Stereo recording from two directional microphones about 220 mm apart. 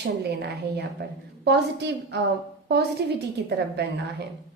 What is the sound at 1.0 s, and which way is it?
A woman's voice, 50° right (ahead or behind).